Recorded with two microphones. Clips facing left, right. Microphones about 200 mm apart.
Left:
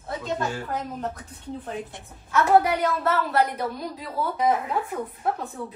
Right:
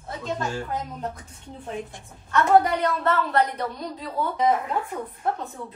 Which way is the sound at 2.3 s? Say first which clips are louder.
Even; 5° left (ahead or behind).